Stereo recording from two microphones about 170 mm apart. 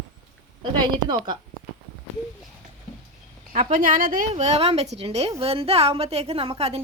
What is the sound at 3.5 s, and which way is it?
A woman's voice, 55° right (ahead or behind).